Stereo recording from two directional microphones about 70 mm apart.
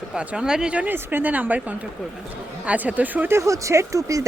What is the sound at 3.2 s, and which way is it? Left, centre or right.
Speech, right.